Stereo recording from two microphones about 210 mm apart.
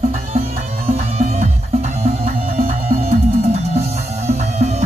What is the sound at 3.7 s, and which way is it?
Music, 30° right (ahead or behind).